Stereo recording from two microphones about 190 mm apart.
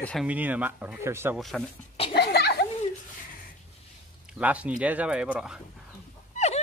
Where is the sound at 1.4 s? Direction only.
Centre (ahead or behind).